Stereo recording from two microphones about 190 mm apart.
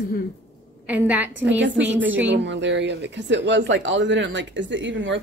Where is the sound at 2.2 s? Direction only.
70° right (ahead or behind).